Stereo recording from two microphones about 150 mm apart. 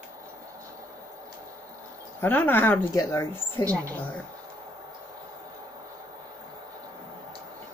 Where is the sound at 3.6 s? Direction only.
20° right (ahead or behind).